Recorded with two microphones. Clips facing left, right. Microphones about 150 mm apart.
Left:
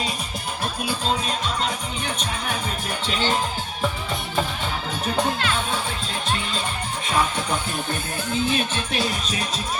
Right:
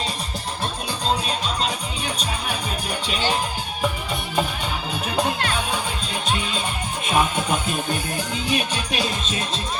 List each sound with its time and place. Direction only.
8.3 s music: 15° right (ahead or behind)